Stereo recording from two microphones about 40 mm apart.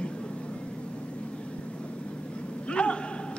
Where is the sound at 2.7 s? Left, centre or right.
Left.